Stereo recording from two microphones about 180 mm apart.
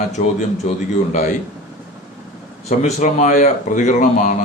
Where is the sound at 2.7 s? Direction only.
40° left (ahead or behind).